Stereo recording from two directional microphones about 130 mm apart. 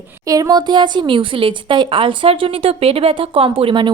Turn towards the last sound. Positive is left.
turn(degrees=-40)  # may be behind; listen again after turning